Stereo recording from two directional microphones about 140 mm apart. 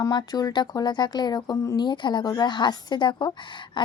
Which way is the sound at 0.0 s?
30° left (ahead or behind).